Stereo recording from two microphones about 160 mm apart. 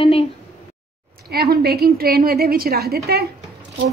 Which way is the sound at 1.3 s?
75° right (ahead or behind).